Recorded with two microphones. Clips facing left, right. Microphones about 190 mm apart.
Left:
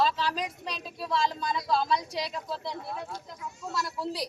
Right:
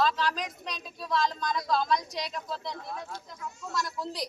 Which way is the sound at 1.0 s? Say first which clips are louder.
Even; 30° left (ahead or behind).